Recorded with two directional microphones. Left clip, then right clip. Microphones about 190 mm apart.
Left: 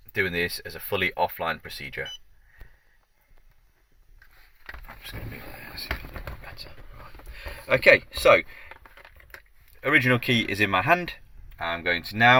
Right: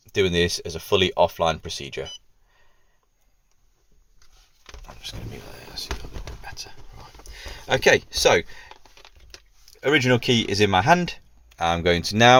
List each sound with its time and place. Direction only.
0.1 s speech: 50° right (ahead or behind)
7.3 s speech: 45° right (ahead or behind)
9.8 s speech: 50° right (ahead or behind)